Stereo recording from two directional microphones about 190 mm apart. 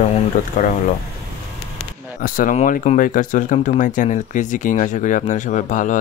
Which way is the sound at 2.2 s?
45° left (ahead or behind).